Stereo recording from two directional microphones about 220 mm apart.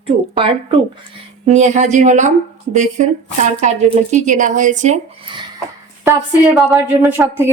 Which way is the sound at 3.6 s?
30° right (ahead or behind).